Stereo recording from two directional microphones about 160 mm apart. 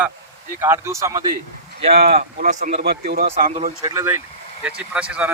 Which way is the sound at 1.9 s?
70° right (ahead or behind).